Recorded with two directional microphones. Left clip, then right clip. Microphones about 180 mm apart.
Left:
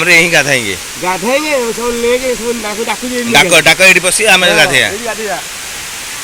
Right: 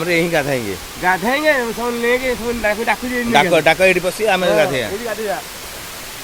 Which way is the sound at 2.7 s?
Centre (ahead or behind).